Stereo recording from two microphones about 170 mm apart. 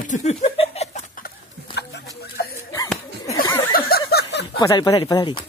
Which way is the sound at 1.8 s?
75° left (ahead or behind).